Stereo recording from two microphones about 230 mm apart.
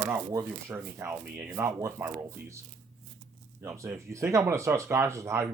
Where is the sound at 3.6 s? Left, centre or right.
Centre.